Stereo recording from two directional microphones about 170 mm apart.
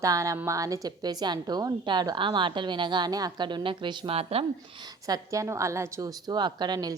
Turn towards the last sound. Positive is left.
turn(degrees=-25)  # may be behind; listen again after turning